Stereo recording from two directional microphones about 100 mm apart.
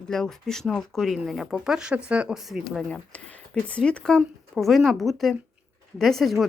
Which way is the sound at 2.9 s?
15° left (ahead or behind).